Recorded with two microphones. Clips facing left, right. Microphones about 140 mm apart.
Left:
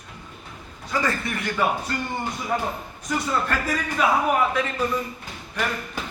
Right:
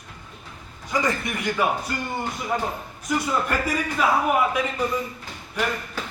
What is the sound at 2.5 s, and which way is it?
Speech, centre (ahead or behind).